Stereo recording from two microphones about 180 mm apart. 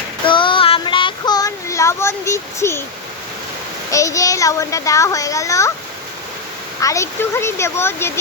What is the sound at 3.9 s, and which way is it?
Speech, 15° left (ahead or behind).